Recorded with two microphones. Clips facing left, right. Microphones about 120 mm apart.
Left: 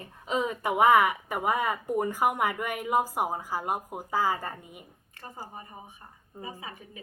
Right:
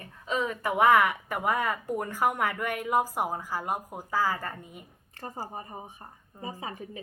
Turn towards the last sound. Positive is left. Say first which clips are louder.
# right 4 dB
turn(degrees=-35)  # may be behind; listen again after turning